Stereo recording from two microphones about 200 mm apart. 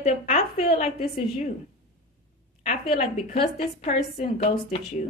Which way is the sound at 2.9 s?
30° left (ahead or behind).